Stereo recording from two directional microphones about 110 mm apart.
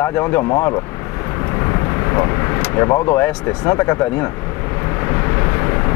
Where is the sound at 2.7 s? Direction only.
20° left (ahead or behind).